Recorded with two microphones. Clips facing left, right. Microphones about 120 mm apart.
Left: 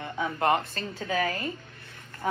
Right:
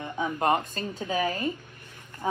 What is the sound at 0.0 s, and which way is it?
Speech, 20° right (ahead or behind).